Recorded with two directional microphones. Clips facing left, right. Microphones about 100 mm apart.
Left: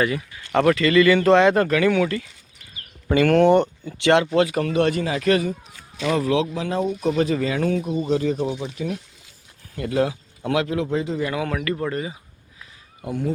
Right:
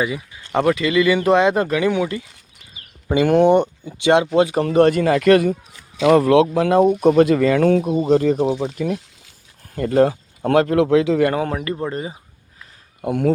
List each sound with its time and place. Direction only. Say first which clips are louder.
0.0 s speech: even; 15° right (ahead or behind)
4.4 s speech: right 3 dB; 30° right (ahead or behind)
4.7 s speech: right 7 dB; 45° right (ahead or behind)
7.9 s speech: right 5 dB; 30° right (ahead or behind)
8.1 s speech: right 6 dB; 50° right (ahead or behind)
10.8 s a man's voice: right 9 dB; 85° right
11.3 s speech: right 3 dB; 35° right (ahead or behind)
13.0 s speech: right 7 dB; 65° right (ahead or behind)